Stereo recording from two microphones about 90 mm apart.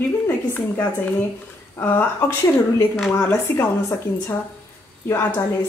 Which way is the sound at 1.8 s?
25° left (ahead or behind).